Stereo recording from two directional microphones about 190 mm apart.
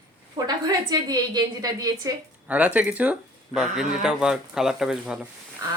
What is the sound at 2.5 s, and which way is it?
Speech, 10° right (ahead or behind).